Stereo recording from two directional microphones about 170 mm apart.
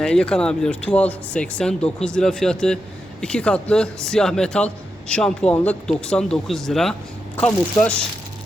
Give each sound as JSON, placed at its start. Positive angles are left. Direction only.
{"t": 0.0, "sound": "a man's voice", "side_deg": 5}